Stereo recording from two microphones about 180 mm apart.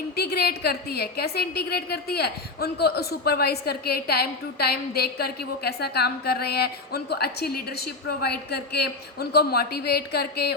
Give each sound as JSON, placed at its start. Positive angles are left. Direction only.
{"t": 0.2, "sound": "a woman's voice", "side_deg": 60}